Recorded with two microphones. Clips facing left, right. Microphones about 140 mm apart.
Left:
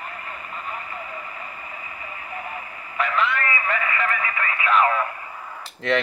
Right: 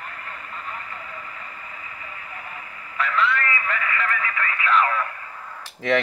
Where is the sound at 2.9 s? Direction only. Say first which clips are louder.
Even; 20° left (ahead or behind).